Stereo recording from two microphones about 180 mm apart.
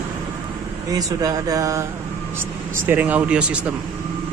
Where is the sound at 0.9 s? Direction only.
20° right (ahead or behind).